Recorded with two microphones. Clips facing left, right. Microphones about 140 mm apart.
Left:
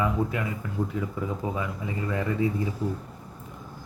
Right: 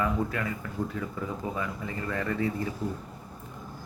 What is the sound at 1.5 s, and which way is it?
A man's voice, 15° left (ahead or behind).